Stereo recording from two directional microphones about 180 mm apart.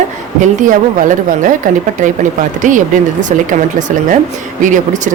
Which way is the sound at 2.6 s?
45° right (ahead or behind).